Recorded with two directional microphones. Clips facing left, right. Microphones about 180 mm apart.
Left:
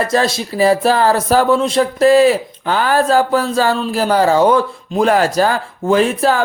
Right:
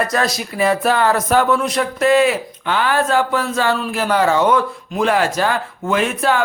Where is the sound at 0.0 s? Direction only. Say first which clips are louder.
Left 3 dB; 30° left (ahead or behind).